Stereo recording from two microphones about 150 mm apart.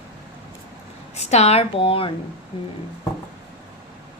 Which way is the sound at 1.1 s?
45° left (ahead or behind).